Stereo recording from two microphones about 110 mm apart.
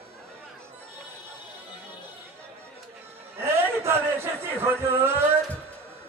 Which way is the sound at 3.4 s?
25° right (ahead or behind).